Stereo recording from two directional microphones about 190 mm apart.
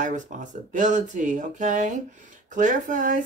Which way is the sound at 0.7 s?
40° right (ahead or behind).